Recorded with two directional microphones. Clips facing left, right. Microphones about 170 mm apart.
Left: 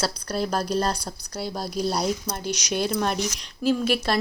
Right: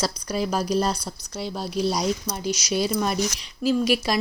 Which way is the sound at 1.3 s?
10° left (ahead or behind).